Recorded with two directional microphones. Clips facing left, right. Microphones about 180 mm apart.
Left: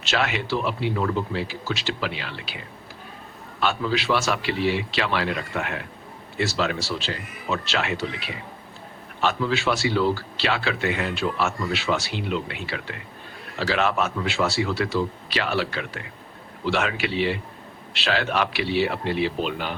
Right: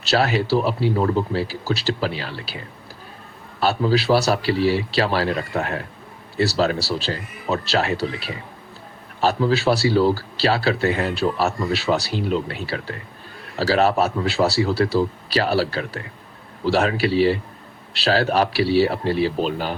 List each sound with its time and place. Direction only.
0.0 s speech: 35° right (ahead or behind)